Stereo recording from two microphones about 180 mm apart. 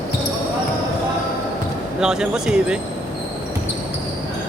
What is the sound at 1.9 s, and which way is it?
Speech, 5° right (ahead or behind).